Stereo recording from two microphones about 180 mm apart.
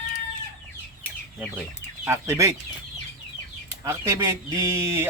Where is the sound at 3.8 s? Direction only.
15° right (ahead or behind).